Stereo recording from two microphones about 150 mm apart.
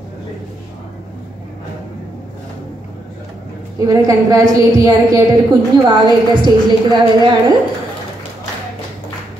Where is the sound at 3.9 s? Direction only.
20° right (ahead or behind).